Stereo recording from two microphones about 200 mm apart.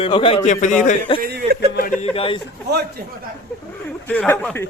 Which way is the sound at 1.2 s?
50° right (ahead or behind).